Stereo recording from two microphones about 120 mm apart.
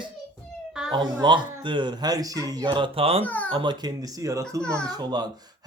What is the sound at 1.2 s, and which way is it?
Speech, 40° right (ahead or behind).